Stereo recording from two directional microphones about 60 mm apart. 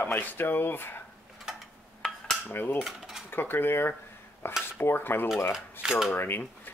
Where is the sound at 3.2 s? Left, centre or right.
Left.